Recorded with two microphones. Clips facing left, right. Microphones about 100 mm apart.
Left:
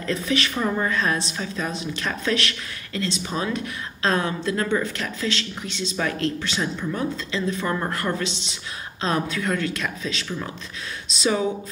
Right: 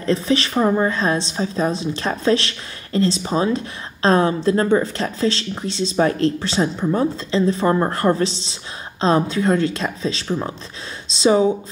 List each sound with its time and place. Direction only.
0.0 s a woman's voice: 30° right (ahead or behind)